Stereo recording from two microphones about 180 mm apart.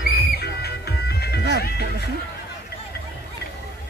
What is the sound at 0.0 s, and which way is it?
Music, 60° left (ahead or behind).